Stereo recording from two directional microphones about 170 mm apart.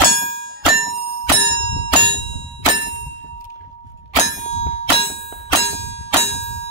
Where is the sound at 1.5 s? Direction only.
90° left.